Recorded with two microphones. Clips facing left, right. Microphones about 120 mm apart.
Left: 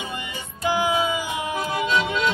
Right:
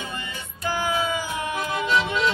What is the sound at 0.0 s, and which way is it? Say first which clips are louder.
Music: left 2 dB; 15° left (ahead or behind).